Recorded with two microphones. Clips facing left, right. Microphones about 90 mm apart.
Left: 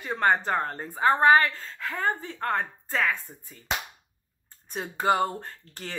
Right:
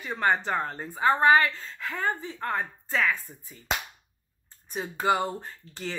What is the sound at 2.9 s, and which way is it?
Speech, 30° left (ahead or behind).